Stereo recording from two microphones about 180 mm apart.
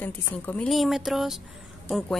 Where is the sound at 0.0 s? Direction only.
10° left (ahead or behind).